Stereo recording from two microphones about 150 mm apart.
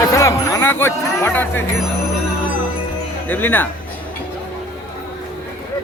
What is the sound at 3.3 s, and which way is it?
Speech, 10° left (ahead or behind).